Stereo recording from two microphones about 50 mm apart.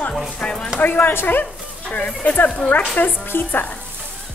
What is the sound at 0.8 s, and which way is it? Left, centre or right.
Speech, left.